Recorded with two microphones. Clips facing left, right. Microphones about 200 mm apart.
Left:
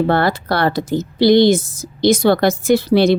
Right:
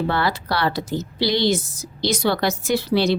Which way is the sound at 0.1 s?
50° left (ahead or behind).